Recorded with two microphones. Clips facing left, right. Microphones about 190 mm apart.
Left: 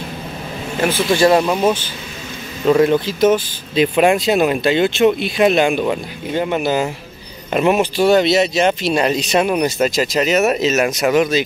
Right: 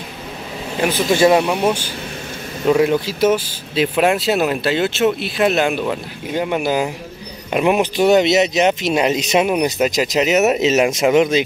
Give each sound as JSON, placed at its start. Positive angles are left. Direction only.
{"t": 1.1, "sound": "speech", "side_deg": -15}